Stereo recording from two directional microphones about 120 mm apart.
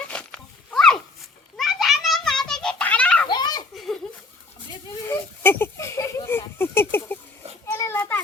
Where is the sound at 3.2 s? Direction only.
35° left (ahead or behind).